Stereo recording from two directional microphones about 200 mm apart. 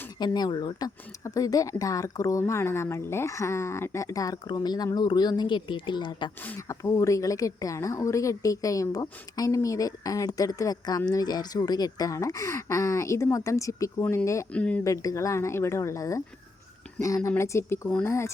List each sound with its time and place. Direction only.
0.2 s speech: 20° left (ahead or behind)
6.4 s speech: 10° left (ahead or behind)